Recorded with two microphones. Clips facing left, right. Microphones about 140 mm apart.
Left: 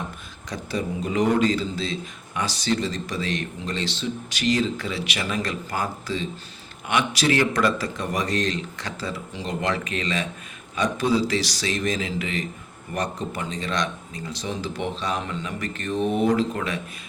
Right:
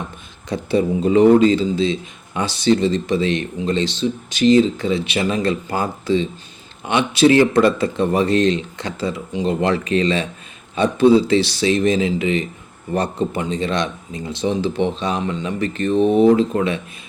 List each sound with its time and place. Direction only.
0.5 s speech: 25° right (ahead or behind)